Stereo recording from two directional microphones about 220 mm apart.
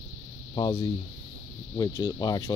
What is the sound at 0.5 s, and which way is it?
Speech, 15° left (ahead or behind).